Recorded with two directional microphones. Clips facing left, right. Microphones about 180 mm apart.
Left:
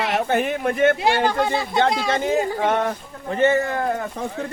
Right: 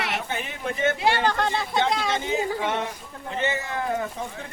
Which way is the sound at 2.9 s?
55° left (ahead or behind).